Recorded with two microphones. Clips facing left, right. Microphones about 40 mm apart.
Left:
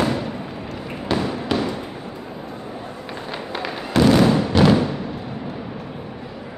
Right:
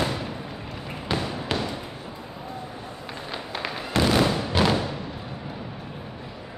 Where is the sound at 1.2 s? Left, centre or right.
Centre.